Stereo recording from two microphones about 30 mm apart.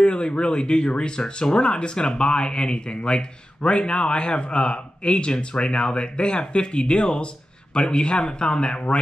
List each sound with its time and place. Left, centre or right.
0.0 s speech: left